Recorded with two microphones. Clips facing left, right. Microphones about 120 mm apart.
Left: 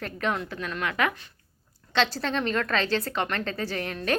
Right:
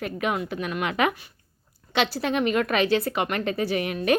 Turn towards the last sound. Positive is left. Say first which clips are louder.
# right 5 dB
turn(degrees=-15)  # may be behind; listen again after turning